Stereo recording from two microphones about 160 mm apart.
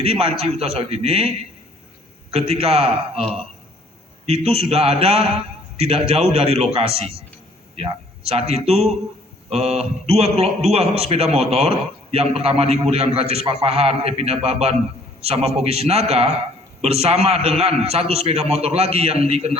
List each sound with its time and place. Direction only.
0.0 s a man's voice: 40° right (ahead or behind)
2.3 s a man's voice: 40° right (ahead or behind)